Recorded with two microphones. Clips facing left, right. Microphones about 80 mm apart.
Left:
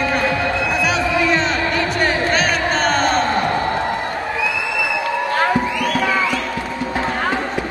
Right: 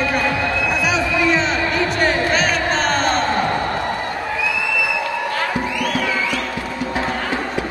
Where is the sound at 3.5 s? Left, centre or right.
Centre.